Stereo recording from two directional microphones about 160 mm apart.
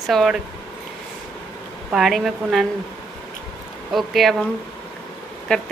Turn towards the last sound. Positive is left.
turn(degrees=5)  # may be behind; listen again after turning